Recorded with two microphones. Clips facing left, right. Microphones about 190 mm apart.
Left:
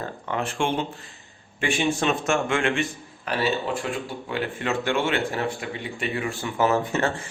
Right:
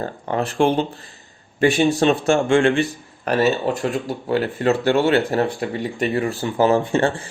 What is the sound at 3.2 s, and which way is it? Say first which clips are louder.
Speech: right 7 dB; 45° right (ahead or behind).